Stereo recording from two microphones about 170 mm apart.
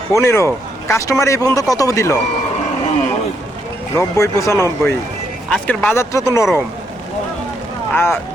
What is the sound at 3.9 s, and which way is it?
Speech, 20° left (ahead or behind).